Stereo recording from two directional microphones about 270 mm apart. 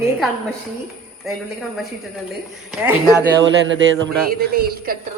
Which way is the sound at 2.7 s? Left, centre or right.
Centre.